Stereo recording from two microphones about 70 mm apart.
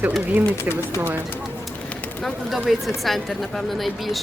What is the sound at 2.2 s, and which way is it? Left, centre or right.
Speech, centre.